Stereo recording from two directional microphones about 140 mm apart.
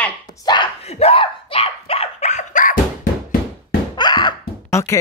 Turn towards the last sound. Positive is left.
turn(degrees=20)  # may be behind; listen again after turning